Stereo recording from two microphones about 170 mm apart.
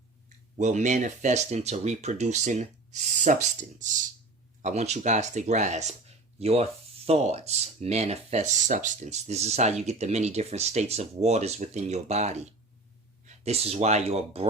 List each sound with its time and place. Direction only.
0.6 s speech: 45° right (ahead or behind)